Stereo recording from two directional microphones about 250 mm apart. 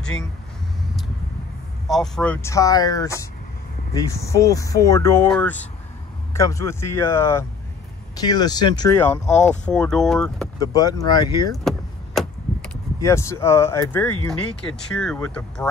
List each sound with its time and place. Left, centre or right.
1.9 s speech: centre
10.6 s speech: centre
11.6 s vehicle: centre
13.0 s speech: centre